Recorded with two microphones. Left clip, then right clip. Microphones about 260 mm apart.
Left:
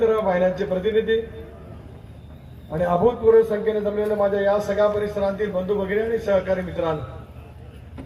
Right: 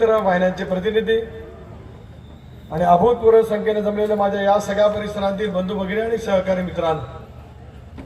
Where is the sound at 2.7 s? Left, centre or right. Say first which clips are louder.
Right 5 dB; right.